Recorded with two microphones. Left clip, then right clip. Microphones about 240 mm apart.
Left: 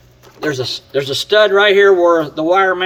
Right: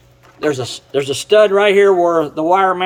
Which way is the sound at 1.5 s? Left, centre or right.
Right.